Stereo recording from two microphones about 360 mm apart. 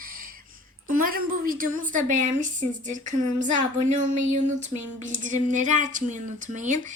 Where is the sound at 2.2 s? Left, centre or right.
Right.